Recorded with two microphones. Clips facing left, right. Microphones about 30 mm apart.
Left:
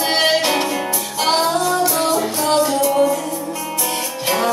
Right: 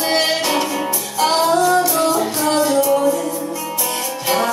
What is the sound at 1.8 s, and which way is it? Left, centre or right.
Music, left.